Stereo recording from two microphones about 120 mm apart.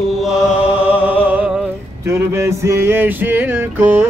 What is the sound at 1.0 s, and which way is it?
Music, 10° right (ahead or behind).